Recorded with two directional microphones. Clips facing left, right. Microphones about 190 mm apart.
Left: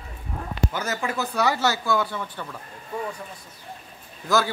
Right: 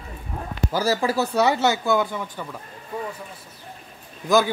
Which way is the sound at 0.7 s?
35° right (ahead or behind).